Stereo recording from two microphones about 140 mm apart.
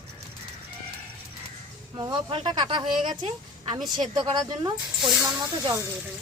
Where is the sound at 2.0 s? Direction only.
35° right (ahead or behind).